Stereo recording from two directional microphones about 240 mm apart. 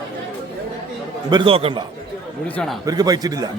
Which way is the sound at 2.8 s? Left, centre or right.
Centre.